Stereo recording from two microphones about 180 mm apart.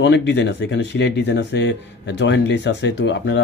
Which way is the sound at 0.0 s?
80° left.